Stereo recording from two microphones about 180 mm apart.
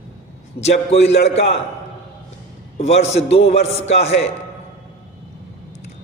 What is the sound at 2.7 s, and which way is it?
Speech, 35° left (ahead or behind).